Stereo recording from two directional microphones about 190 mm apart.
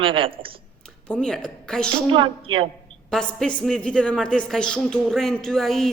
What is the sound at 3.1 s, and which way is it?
A woman's voice, 5° left (ahead or behind).